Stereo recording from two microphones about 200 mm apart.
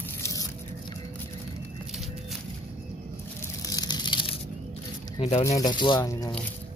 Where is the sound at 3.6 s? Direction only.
20° left (ahead or behind).